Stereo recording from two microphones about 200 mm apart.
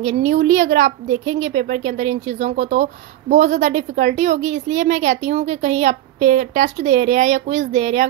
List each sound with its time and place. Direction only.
0.0 s speech: 35° right (ahead or behind)